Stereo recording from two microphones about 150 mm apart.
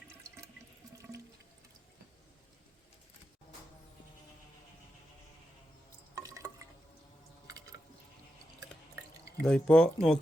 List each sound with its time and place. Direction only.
0.2 s water: 20° right (ahead or behind)
6.1 s drip: 20° right (ahead or behind)
9.4 s speech: 5° left (ahead or behind)